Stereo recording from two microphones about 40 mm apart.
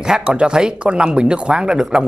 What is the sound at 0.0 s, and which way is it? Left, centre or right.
Speech, centre.